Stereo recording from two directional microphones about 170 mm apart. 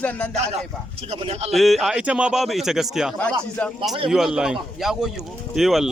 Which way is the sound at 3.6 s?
10° left (ahead or behind).